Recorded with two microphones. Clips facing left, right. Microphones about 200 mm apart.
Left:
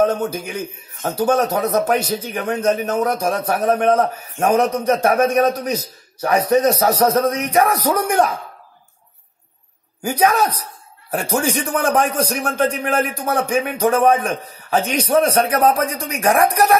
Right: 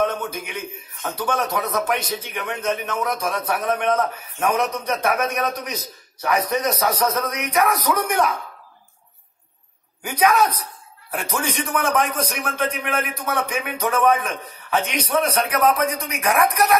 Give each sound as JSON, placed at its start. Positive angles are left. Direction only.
{"t": 0.3, "sound": "a man's voice", "side_deg": 35}
{"t": 10.0, "sound": "a man's voice", "side_deg": 30}